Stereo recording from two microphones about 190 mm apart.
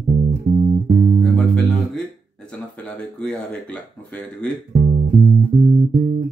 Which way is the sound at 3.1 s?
5° left (ahead or behind).